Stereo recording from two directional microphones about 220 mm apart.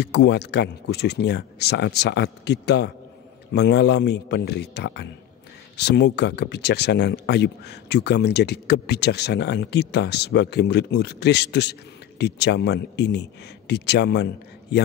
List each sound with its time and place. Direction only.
0.0 s speech: 50° left (ahead or behind)